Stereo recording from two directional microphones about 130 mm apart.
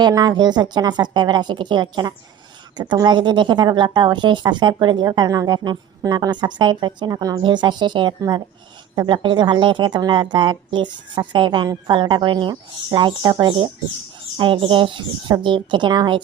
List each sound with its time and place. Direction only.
0.0 s a woman's voice: 30° right (ahead or behind)